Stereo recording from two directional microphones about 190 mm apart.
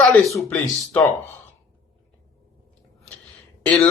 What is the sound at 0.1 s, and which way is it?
Speech, centre (ahead or behind).